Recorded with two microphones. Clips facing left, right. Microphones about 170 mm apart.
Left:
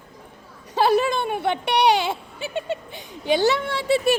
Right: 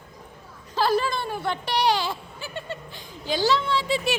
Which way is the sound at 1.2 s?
65° left (ahead or behind).